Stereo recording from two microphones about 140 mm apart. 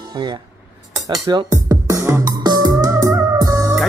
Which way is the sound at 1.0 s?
30° right (ahead or behind).